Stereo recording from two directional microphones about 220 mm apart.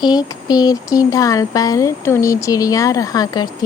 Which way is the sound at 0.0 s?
20° left (ahead or behind).